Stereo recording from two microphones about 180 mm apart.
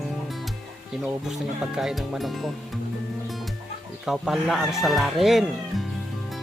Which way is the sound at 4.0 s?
Centre (ahead or behind).